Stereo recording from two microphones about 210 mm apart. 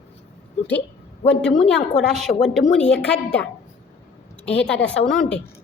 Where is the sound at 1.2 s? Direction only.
30° left (ahead or behind).